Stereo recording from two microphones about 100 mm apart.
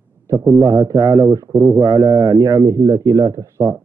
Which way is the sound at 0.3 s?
30° right (ahead or behind).